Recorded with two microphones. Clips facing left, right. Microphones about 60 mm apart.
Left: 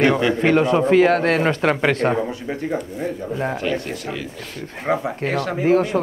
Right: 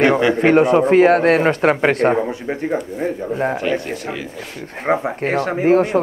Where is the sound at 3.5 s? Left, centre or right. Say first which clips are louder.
Right 3 dB; centre.